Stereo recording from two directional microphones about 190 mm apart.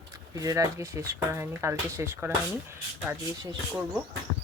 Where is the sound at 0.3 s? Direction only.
15° right (ahead or behind).